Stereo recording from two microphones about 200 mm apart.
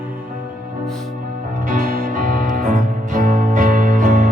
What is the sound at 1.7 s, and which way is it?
Music, 45° right (ahead or behind).